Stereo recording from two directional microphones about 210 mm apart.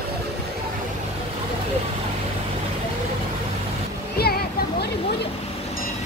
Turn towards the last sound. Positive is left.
turn(degrees=50)  # may be behind; listen again after turning